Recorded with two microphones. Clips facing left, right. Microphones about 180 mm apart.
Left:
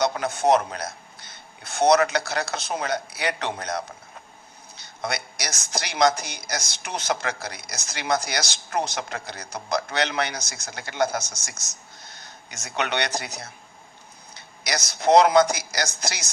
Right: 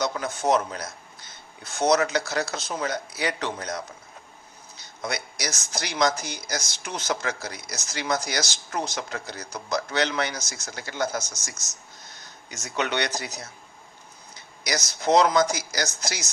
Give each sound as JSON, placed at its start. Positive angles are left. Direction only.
{"t": 0.0, "sound": "a man's voice", "side_deg": 65}
{"t": 5.0, "sound": "speech", "side_deg": 65}
{"t": 12.5, "sound": "a man's voice", "side_deg": 65}